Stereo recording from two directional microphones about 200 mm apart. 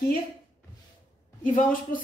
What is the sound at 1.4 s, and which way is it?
Speech, 40° left (ahead or behind).